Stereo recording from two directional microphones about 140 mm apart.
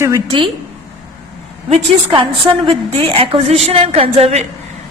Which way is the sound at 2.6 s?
40° right (ahead or behind).